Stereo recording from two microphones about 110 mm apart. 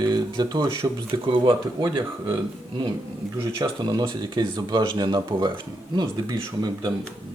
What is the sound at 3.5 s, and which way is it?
Speech, 40° right (ahead or behind).